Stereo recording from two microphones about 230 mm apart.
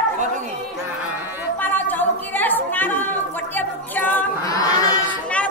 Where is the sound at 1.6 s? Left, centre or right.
Centre.